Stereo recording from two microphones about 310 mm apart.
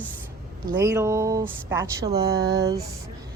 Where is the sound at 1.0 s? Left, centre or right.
Centre.